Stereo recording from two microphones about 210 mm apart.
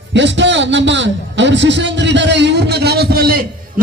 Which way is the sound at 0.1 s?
60° right (ahead or behind).